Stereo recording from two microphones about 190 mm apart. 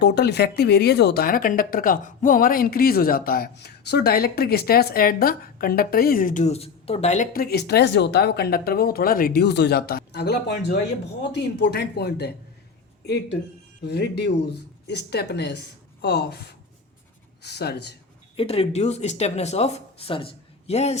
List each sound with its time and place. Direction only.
0.0 s speech: 60° left (ahead or behind); by 7.3 s 35° left (ahead or behind)
7.3 s speech: 55° left (ahead or behind)
13.8 s a woman's voice: 60° left (ahead or behind)
18.3 s speech: 30° left (ahead or behind)